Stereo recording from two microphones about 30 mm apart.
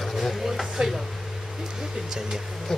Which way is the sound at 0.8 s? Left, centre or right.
Right.